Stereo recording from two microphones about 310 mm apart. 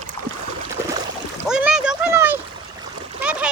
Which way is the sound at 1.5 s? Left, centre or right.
Centre.